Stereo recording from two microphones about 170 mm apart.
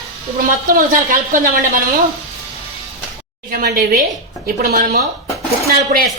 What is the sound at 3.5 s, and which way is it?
A woman's voice, 60° right (ahead or behind).